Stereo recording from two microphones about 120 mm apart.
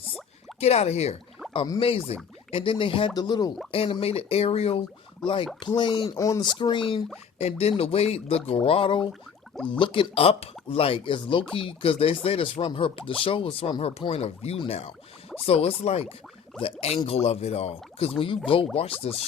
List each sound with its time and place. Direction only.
0.6 s speech: 60° left (ahead or behind)
1.8 s speech: 50° left (ahead or behind)
3.2 s speech: 35° left (ahead or behind)
3.7 s speech: 50° left (ahead or behind)
6.1 s speech: 30° left (ahead or behind)
7.3 s speech: 60° left (ahead or behind)
17.1 s speech: 60° left (ahead or behind)
18.2 s speech: 50° left (ahead or behind)
19.0 s speech: 60° left (ahead or behind)